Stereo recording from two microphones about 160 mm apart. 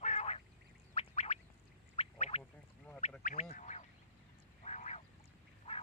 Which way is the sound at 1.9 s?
40° left (ahead or behind).